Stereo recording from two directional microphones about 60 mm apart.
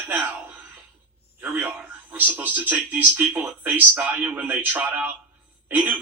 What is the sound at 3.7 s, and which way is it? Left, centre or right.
A man's voice, right.